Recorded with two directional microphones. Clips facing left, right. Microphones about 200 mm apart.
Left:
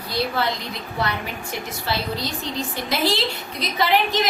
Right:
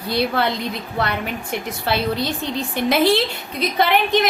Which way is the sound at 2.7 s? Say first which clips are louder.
Right 8 dB; 55° right (ahead or behind).